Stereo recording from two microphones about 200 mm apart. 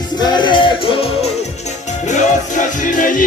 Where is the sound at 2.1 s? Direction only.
40° left (ahead or behind).